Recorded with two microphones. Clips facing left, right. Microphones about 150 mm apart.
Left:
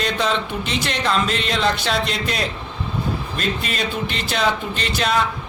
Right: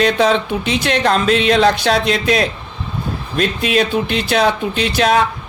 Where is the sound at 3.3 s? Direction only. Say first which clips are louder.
Right 13 dB; 70° right (ahead or behind).